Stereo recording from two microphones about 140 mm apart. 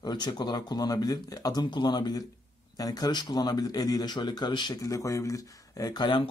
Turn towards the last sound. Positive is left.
turn(degrees=35)  # may be behind; listen again after turning